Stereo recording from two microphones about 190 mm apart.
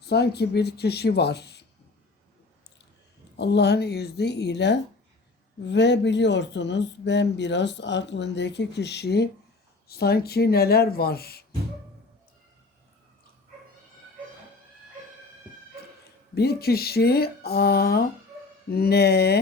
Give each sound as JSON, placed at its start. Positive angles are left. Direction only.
{"t": 0.0, "sound": "speech", "side_deg": 60}
{"t": 3.3, "sound": "speech", "side_deg": 65}
{"t": 16.3, "sound": "speech", "side_deg": 55}